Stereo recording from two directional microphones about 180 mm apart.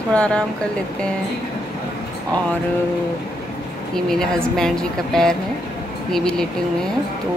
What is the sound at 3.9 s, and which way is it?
Speech, 5° left (ahead or behind).